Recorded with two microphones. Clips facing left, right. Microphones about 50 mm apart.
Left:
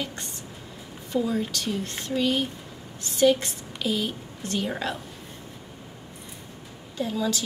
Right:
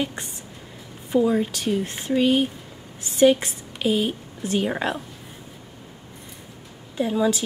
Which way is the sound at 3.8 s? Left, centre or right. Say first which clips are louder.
Right 5 dB; centre.